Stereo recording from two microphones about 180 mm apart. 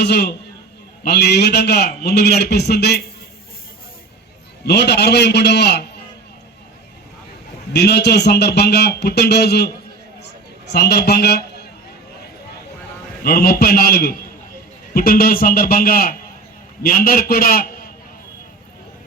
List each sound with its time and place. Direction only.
0.0 s a man's voice: 65° left (ahead or behind)
4.6 s a man's voice: 65° left (ahead or behind)
7.7 s a man's voice: 65° left (ahead or behind)
13.2 s a man's voice: 55° left (ahead or behind)